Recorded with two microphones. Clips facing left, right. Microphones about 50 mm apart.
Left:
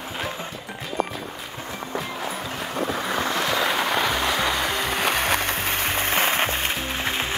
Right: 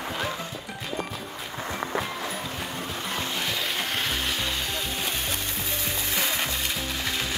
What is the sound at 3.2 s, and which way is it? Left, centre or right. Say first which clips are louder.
Vehicle: left 8 dB; left.